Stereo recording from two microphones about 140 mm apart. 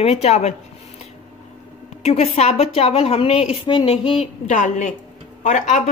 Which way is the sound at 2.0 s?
50° left (ahead or behind).